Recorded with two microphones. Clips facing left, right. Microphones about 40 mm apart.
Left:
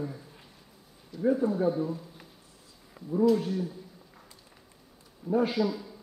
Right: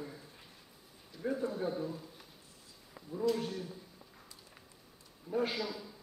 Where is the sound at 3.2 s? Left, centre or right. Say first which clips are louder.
Left 9 dB; centre.